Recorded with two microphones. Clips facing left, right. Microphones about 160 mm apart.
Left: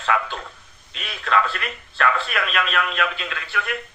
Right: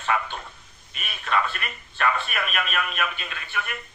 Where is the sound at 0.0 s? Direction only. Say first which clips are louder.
Left 3 dB; 85° left.